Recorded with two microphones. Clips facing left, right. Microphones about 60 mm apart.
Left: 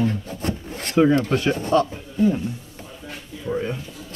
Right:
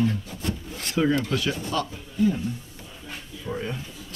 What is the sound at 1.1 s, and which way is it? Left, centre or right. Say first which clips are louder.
Speech: left 5 dB; left.